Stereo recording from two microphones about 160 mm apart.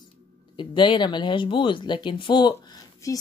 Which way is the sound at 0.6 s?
30° left (ahead or behind).